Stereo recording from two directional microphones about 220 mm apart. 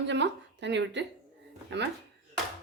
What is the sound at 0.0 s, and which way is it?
Speech, 55° right (ahead or behind).